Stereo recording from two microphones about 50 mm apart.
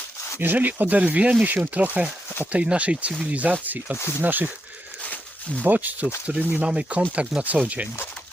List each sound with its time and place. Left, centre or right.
0.3 s speech: right
1.5 s speech: right
5.6 s speech: right
6.3 s speech: right